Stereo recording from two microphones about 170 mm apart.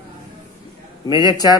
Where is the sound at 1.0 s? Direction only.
25° left (ahead or behind).